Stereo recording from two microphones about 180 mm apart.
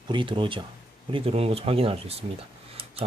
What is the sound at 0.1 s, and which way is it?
Speech, 25° right (ahead or behind).